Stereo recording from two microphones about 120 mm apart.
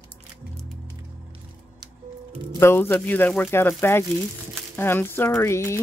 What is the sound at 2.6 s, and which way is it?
Speech, 20° left (ahead or behind).